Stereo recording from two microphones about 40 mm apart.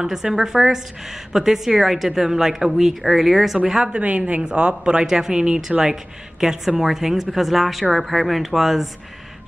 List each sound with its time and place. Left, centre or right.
0.0 s a woman's voice: centre
3.8 s a woman's voice: right
4.4 s a woman's voice: right; by 8.8 s centre